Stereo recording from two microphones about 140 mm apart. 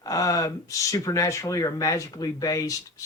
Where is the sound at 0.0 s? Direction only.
25° left (ahead or behind).